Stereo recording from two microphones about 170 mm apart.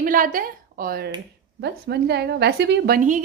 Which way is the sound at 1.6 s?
75° right (ahead or behind).